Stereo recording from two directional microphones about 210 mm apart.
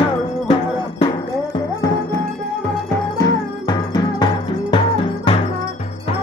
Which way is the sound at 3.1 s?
20° left (ahead or behind).